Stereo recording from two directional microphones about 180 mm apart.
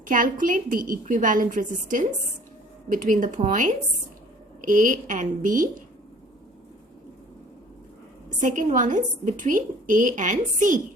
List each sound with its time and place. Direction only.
0.0 s a woman's voice: 50° right (ahead or behind)
8.4 s a woman's voice: 45° right (ahead or behind)